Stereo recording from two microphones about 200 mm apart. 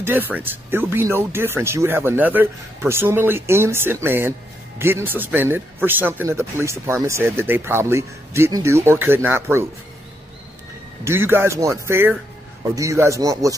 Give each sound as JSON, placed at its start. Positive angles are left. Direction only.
{"t": 0.0, "sound": "a man's voice", "side_deg": -10}
{"t": 11.1, "sound": "a man's voice", "side_deg": -10}